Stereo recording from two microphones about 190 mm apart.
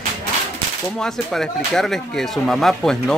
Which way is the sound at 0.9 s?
5° left (ahead or behind).